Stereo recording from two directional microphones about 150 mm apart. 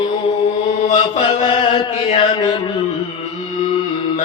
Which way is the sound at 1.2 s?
30° left (ahead or behind).